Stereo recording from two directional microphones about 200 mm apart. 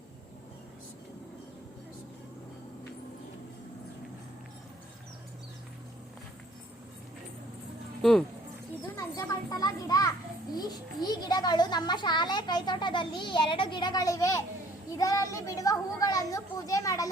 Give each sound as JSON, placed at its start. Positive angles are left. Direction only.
{"t": 8.0, "sound": "speech", "side_deg": 0}
{"t": 9.0, "sound": "children playing", "side_deg": 20}
{"t": 10.5, "sound": "a child's voice", "side_deg": 20}